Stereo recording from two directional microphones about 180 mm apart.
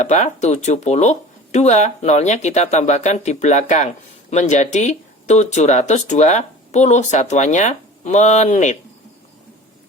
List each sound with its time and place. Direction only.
0.0 s speech: 40° left (ahead or behind)